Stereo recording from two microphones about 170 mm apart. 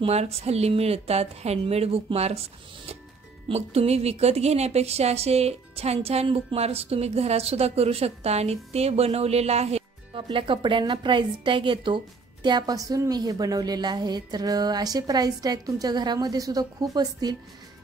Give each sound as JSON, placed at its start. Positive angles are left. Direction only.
{"t": 0.0, "sound": "speech", "side_deg": -40}
{"t": 3.4, "sound": "a woman's voice", "side_deg": -35}